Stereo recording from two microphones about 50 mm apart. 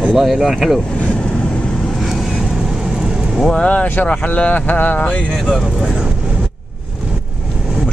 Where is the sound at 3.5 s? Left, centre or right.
Left.